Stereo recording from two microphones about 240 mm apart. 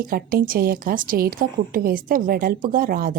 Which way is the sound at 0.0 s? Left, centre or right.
Right.